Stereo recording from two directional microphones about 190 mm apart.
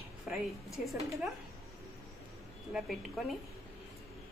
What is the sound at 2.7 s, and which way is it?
Speech, centre (ahead or behind).